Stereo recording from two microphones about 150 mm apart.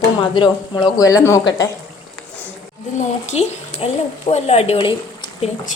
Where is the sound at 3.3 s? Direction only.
45° left (ahead or behind).